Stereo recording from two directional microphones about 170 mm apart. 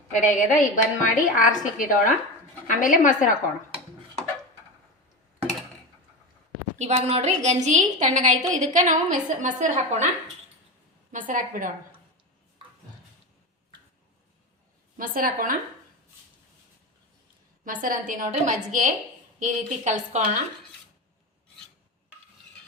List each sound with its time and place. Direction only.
0.2 s a woman's voice: 50° left (ahead or behind)
6.7 s a woman's voice: 40° right (ahead or behind)
11.3 s a woman's voice: 50° right (ahead or behind)
14.9 s a woman's voice: 55° right (ahead or behind)
17.7 s a woman's voice: 55° right (ahead or behind)